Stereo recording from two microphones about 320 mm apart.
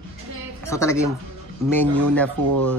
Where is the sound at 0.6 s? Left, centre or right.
Centre.